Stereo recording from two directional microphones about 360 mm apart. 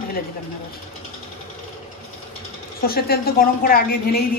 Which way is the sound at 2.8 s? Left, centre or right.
Left.